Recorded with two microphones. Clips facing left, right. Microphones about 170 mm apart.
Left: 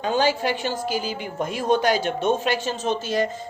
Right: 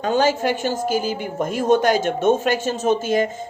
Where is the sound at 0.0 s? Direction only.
45° right (ahead or behind).